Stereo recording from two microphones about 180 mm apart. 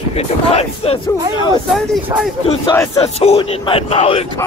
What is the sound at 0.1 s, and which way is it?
Speech, 35° left (ahead or behind).